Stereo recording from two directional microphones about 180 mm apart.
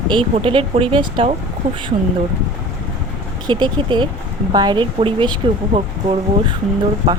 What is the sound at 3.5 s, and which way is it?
Speech, 25° right (ahead or behind).